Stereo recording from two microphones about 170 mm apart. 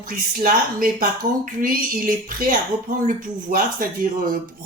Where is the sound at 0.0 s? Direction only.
55° right (ahead or behind).